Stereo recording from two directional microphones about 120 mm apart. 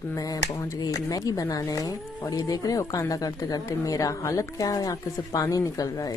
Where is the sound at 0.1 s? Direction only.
30° left (ahead or behind).